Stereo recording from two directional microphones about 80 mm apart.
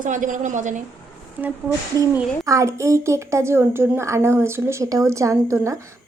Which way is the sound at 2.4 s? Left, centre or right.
Right.